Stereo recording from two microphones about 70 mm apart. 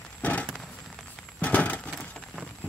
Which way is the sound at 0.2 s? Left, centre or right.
Left.